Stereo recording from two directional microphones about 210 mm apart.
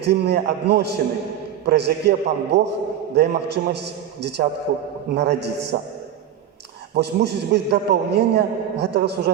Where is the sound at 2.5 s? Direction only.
35° right (ahead or behind).